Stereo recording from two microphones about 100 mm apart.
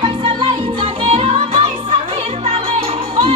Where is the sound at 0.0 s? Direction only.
60° right (ahead or behind).